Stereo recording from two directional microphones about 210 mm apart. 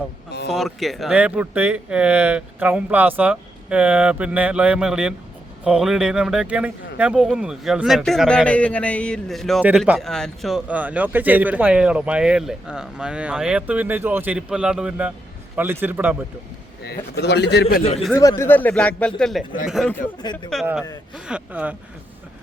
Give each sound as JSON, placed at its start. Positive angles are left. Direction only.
{"t": 0.5, "sound": "a man's voice", "side_deg": 0}
{"t": 16.8, "sound": "a man's voice", "side_deg": 50}
{"t": 18.1, "sound": "a man's voice", "side_deg": 15}